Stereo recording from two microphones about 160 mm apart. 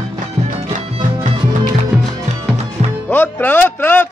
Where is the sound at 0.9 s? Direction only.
30° right (ahead or behind).